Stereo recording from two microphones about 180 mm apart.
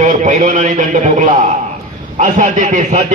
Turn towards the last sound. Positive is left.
turn(degrees=-45)  # may be behind; listen again after turning